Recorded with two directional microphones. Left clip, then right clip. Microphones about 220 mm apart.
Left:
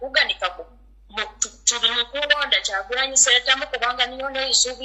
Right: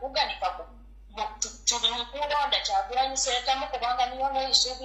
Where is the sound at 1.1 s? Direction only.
40° left (ahead or behind).